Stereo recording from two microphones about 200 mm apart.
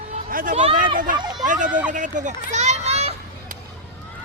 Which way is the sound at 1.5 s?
40° right (ahead or behind).